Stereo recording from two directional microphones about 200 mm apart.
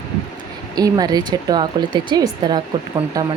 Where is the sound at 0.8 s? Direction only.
20° right (ahead or behind).